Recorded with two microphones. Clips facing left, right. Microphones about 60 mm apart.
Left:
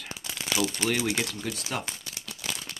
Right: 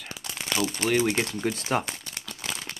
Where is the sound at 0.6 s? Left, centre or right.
Centre.